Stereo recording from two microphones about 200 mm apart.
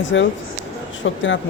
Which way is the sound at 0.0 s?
70° left (ahead or behind).